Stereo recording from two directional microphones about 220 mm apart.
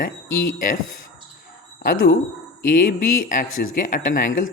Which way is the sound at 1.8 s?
40° left (ahead or behind).